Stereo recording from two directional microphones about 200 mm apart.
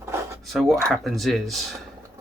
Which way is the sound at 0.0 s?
15° right (ahead or behind).